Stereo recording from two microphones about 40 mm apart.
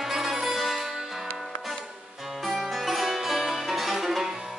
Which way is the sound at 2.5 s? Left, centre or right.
Centre.